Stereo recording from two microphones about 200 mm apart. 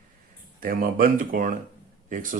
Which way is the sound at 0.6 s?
45° right (ahead or behind).